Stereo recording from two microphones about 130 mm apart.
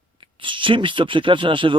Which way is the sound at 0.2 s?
40° right (ahead or behind).